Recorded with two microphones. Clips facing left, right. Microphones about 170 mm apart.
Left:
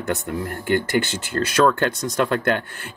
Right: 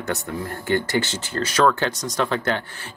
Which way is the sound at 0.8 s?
55° left (ahead or behind).